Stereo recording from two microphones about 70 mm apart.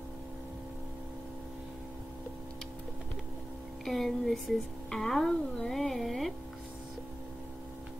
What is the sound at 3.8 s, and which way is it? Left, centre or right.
Music, centre.